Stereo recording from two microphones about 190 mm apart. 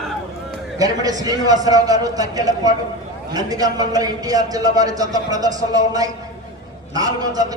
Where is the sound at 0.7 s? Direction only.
20° right (ahead or behind).